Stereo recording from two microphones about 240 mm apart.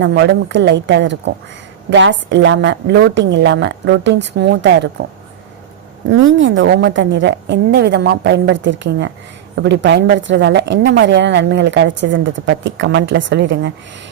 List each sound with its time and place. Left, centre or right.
0.0 s a woman's voice: right
6.1 s a woman's voice: right